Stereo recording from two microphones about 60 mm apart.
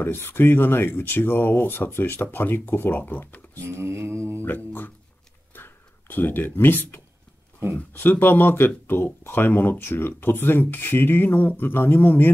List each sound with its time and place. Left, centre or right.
0.0 s speech: left
3.6 s mantra: right
4.4 s music: left
5.5 s a sound: left
8.2 s speech: left